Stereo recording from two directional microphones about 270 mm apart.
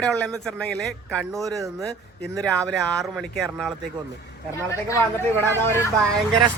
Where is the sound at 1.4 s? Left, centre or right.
Centre.